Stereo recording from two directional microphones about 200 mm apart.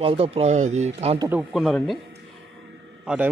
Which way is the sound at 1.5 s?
Centre (ahead or behind).